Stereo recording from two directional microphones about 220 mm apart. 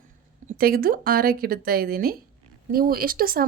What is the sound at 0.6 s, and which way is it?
Speech, 40° right (ahead or behind).